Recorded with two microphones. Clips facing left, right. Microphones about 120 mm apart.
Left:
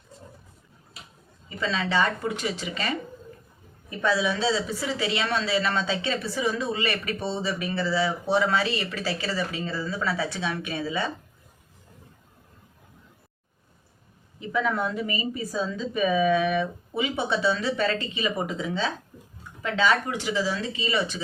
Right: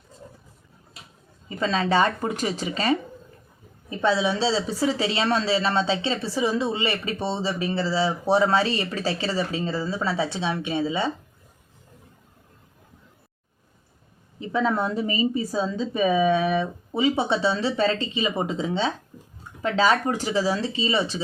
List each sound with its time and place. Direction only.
1.5 s a woman's voice: 40° right (ahead or behind)
14.3 s a woman's voice: 30° right (ahead or behind)